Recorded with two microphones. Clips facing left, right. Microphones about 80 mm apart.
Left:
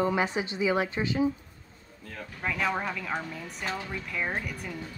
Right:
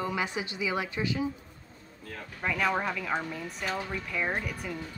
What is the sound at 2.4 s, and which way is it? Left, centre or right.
Speech, centre.